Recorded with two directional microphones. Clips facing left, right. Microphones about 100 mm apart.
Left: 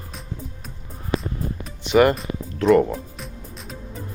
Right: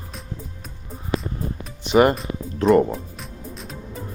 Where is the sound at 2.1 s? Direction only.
Centre (ahead or behind).